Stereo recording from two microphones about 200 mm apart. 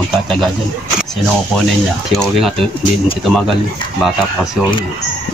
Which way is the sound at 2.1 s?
Centre (ahead or behind).